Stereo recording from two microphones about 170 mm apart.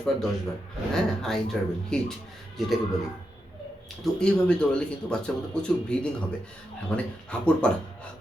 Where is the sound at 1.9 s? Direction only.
5° left (ahead or behind).